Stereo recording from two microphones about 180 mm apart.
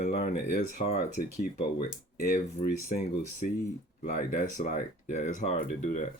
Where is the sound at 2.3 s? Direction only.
40° left (ahead or behind).